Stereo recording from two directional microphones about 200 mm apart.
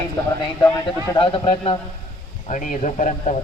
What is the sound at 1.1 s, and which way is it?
Speech, 25° left (ahead or behind).